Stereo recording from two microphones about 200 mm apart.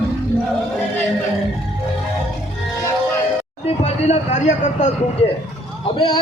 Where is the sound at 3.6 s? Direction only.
35° left (ahead or behind).